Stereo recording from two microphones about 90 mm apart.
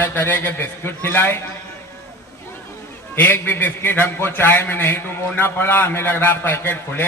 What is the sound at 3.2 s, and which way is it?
A man's voice, 20° left (ahead or behind).